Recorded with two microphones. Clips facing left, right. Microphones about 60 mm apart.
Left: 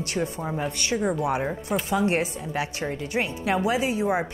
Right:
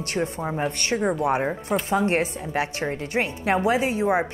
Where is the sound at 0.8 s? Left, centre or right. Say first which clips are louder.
Right 1 dB; right.